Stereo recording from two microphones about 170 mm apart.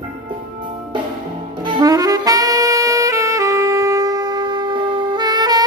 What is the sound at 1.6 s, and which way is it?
Saxophone, 25° right (ahead or behind).